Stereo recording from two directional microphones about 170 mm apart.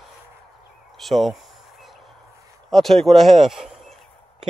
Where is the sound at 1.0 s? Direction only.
Centre (ahead or behind).